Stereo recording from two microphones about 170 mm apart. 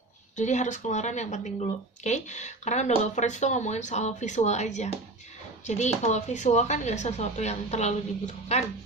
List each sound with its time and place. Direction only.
0.3 s speech: 45° left (ahead or behind)